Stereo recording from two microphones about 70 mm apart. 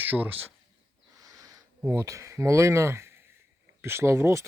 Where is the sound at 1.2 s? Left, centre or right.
Right.